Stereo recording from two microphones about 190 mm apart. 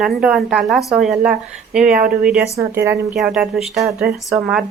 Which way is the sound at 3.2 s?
Centre (ahead or behind).